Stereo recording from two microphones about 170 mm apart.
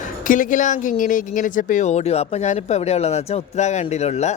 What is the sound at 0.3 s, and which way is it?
Speech, 50° left (ahead or behind).